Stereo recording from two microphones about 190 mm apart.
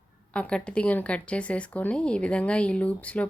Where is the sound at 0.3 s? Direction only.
5° left (ahead or behind).